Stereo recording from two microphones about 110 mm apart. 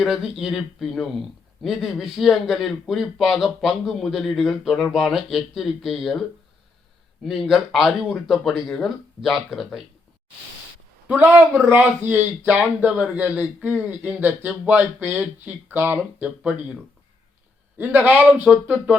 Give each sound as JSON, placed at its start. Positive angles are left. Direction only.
{"t": 0.0, "sound": "a man's voice", "side_deg": -5}
{"t": 7.3, "sound": "a man's voice", "side_deg": -5}
{"t": 11.1, "sound": "speech", "side_deg": -15}
{"t": 17.7, "sound": "speech", "side_deg": -15}